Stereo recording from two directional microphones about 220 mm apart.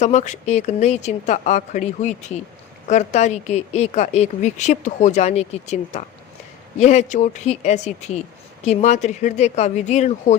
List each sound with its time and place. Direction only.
0.0 s speech: 30° left (ahead or behind)